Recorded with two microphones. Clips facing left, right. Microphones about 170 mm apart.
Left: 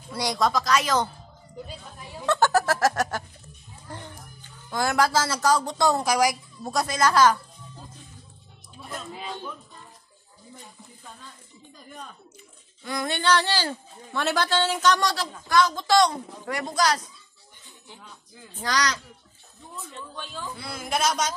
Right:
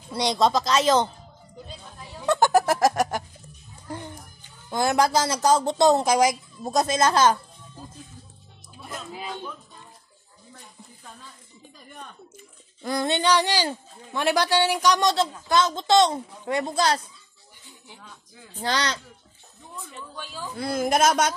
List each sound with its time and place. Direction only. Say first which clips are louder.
0.1 s speech: right 3 dB; 25° right (ahead or behind)
2.2 s music: right 2 dB; 15° right (ahead or behind)
3.9 s speech: right 5 dB; 15° right (ahead or behind)
8.8 s speech: right 1 dB; centre (ahead or behind)
12.8 s a sound: right 4 dB; 35° right (ahead or behind)
13.1 s speech: right 1 dB; 15° right (ahead or behind)
18.6 s speech: even; 30° right (ahead or behind)
20.5 s speech: right 8 dB; 45° right (ahead or behind)